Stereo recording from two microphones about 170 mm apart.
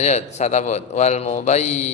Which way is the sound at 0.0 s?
40° left (ahead or behind).